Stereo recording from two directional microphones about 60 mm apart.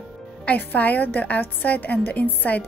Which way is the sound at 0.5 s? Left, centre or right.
Left.